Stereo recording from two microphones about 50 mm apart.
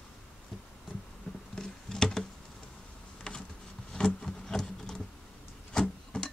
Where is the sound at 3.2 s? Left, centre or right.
Centre.